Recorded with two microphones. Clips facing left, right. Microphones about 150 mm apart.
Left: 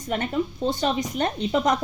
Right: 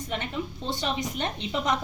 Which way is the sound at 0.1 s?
40° left (ahead or behind).